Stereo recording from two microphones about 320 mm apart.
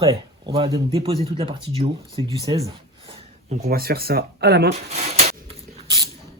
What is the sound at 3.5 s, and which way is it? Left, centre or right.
Speech, right.